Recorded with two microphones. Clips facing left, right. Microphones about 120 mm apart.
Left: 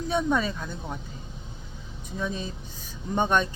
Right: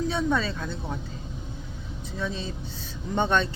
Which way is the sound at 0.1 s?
20° left (ahead or behind).